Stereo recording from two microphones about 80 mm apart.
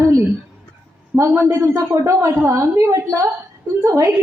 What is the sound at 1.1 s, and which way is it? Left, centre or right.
A man's voice, right.